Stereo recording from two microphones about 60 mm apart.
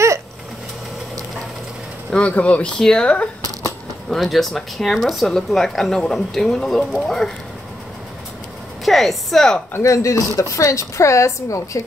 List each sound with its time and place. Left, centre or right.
2.1 s speech: left
2.8 s speech: centre
4.1 s speech: centre
8.8 s speech: centre
9.8 s speech: left